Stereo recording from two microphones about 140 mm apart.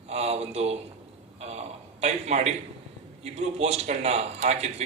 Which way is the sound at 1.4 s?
50° right (ahead or behind).